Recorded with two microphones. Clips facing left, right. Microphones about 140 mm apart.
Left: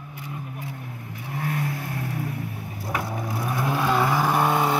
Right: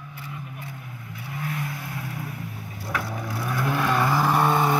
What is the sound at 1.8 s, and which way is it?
Vehicle, 60° left (ahead or behind).